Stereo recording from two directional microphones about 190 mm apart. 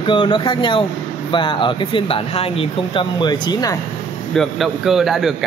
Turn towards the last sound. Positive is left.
turn(degrees=0)  # may be behind; listen again after turning